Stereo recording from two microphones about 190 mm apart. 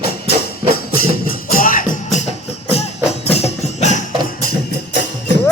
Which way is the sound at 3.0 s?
35° left (ahead or behind).